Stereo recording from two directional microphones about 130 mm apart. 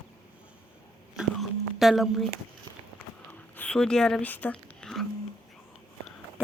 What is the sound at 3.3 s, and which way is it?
Whispering, 10° left (ahead or behind).